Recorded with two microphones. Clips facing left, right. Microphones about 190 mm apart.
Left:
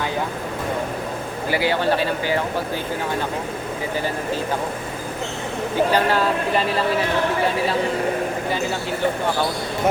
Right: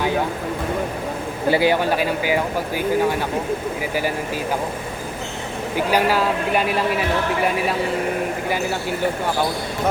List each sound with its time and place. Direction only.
1.5 s speech: 25° right (ahead or behind)
1.7 s speech: 10° right (ahead or behind)
5.7 s speech: 10° right (ahead or behind)